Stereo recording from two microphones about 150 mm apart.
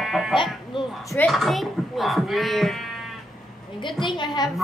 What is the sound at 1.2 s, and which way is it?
Speech, centre (ahead or behind).